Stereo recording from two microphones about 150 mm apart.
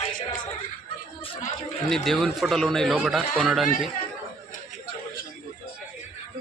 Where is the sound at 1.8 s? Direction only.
Centre (ahead or behind).